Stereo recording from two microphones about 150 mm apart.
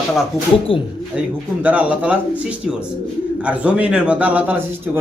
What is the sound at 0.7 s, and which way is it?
Speech, 35° left (ahead or behind).